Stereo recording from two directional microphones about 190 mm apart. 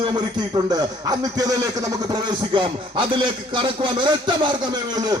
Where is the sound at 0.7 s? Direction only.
20° right (ahead or behind).